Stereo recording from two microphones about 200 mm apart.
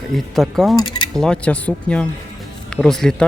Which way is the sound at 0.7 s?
20° left (ahead or behind).